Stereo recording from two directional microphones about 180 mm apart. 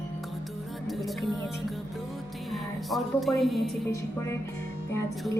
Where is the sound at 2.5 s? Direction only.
Centre (ahead or behind).